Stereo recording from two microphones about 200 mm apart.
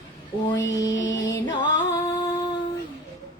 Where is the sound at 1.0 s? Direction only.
65° left (ahead or behind).